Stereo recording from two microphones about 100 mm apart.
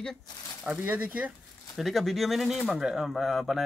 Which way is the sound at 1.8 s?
Centre (ahead or behind).